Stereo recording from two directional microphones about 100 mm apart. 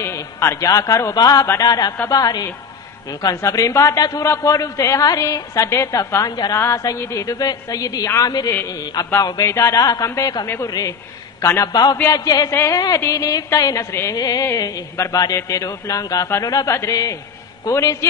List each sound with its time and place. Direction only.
0.0 s a man's voice: 25° left (ahead or behind)
11.4 s a man's voice: 25° left (ahead or behind)
11.7 s a sound: 40° left (ahead or behind)
12.1 s a woman's voice: 35° left (ahead or behind)